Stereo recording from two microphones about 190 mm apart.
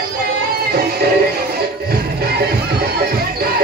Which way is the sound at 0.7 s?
55° right (ahead or behind).